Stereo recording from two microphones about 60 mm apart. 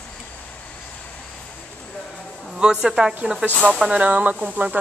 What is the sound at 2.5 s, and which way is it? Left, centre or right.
A woman's voice, centre.